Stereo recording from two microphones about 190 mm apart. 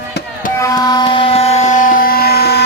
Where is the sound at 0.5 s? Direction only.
15° left (ahead or behind).